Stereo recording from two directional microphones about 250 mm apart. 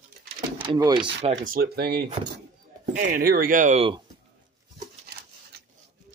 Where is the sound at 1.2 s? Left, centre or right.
Right.